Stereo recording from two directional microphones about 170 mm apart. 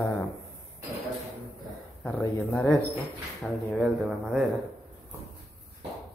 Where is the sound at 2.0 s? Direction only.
5° left (ahead or behind).